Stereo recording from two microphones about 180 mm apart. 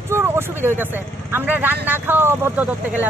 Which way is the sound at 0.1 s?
15° right (ahead or behind).